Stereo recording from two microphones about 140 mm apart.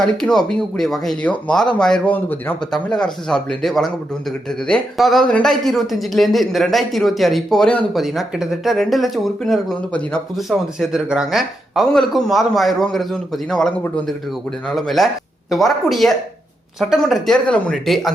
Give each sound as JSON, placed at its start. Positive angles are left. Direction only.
{"t": 0.0, "sound": "speech", "side_deg": 5}